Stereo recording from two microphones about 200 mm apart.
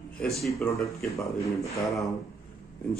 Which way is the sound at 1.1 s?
15° left (ahead or behind).